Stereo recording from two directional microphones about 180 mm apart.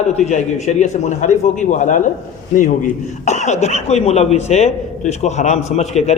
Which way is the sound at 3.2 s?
40° left (ahead or behind).